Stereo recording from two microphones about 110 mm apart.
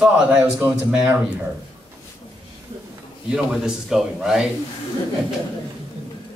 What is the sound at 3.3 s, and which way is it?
Speech, 5° right (ahead or behind).